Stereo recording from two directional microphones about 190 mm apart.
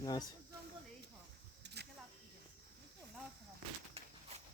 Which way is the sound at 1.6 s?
60° right (ahead or behind).